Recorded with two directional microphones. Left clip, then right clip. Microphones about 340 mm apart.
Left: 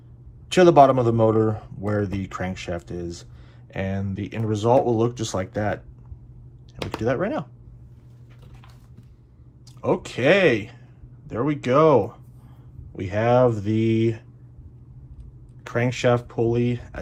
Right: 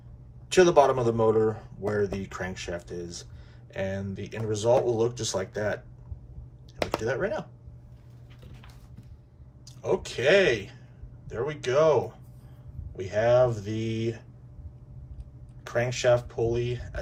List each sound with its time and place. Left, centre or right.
0.5 s a man's voice: left
7.0 s a man's voice: centre
9.6 s a man's voice: centre
15.6 s speech: left